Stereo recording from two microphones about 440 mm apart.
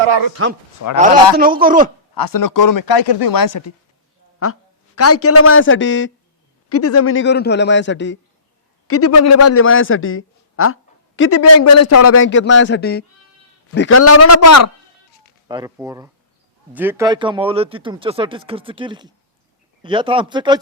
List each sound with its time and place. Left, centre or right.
0.4 s speech: right
0.8 s a man's voice: left
1.4 s speech: centre
2.1 s speech: left
4.4 s a man's voice: left
15.4 s speech: centre